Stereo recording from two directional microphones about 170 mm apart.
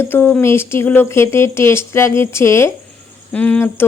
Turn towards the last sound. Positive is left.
turn(degrees=10)  # may be behind; listen again after turning